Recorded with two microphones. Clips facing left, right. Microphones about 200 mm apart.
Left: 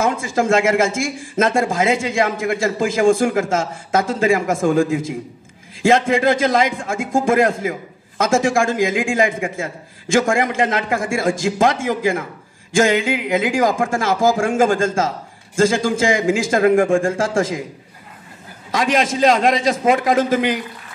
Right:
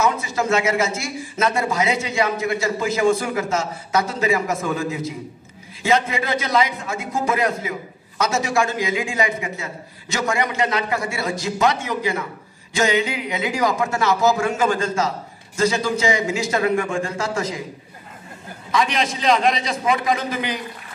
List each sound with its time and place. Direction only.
0.0 s speech: 50° left (ahead or behind)
18.7 s speech: 50° left (ahead or behind)